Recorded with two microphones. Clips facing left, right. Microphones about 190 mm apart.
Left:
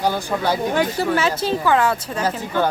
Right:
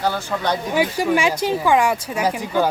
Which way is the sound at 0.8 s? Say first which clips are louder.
Right 1 dB; 10° right (ahead or behind).